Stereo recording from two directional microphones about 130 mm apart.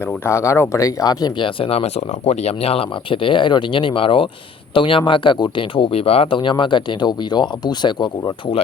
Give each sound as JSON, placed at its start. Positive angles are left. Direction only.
{"t": 0.3, "sound": "speech", "side_deg": 20}